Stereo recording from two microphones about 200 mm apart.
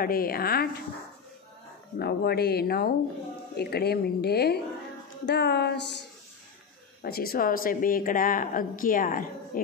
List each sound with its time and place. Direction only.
0.0 s speech: 45° left (ahead or behind)
2.0 s speech: 55° left (ahead or behind)
7.0 s speech: 50° left (ahead or behind)